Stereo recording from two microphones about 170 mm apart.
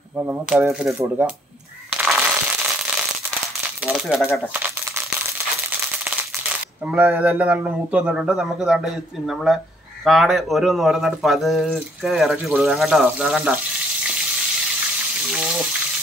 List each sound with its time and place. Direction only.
0.2 s speech: 10° right (ahead or behind)
1.9 s a sound: 5° right (ahead or behind)
3.8 s speech: 5° right (ahead or behind)
6.9 s speech: 10° right (ahead or behind)
15.2 s water: centre (ahead or behind)